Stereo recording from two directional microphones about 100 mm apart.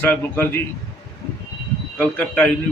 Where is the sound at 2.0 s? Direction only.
15° left (ahead or behind).